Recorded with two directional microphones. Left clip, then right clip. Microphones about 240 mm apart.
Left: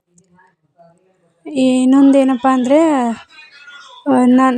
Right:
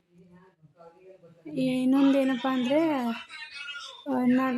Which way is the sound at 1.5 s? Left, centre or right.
Left.